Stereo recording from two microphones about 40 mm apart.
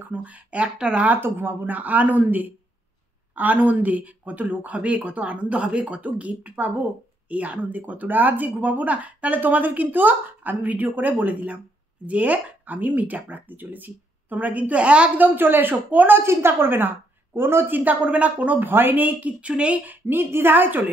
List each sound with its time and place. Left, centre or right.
0.1 s speech: right
0.7 s speech: right
1.2 s speech: right
15.1 s a woman's voice: right
16.1 s a woman's voice: right
18.6 s speech: right
20.1 s a woman's voice: right